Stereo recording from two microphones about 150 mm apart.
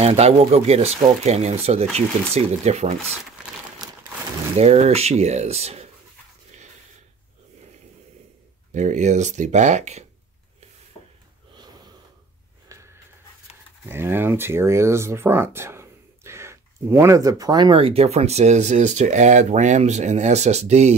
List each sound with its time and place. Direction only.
0.0 s speech: 45° right (ahead or behind)
3.8 s crumpling: 25° right (ahead or behind)
4.6 s speech: 45° right (ahead or behind)
8.7 s speech: 50° right (ahead or behind)
12.6 s a sound: 20° right (ahead or behind)
13.8 s speech: 15° right (ahead or behind); by 20.9 s 45° right (ahead or behind)